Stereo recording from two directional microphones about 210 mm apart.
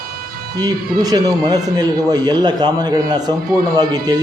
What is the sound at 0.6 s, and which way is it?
Speech, 20° right (ahead or behind).